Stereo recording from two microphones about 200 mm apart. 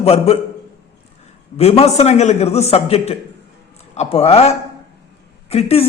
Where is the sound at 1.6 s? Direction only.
30° left (ahead or behind).